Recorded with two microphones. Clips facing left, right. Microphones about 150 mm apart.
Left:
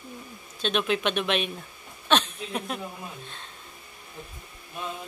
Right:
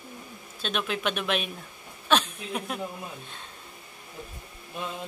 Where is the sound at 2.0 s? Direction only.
10° right (ahead or behind).